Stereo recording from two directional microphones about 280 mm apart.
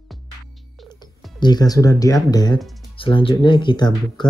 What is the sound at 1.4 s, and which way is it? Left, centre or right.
Speech, centre.